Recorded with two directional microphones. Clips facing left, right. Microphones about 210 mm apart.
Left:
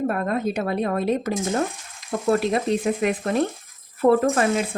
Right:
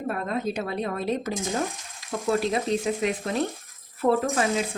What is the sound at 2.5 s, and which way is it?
Speech, 55° left (ahead or behind).